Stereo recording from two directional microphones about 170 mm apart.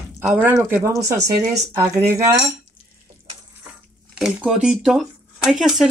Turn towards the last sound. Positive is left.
turn(degrees=0)  # may be behind; listen again after turning